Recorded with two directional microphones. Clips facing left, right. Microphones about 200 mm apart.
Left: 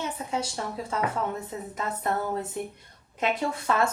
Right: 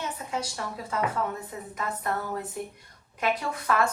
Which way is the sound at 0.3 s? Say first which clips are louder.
Left 2 dB; 25° left (ahead or behind).